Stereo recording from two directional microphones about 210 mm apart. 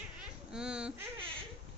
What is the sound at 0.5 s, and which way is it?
Speech, 5° right (ahead or behind).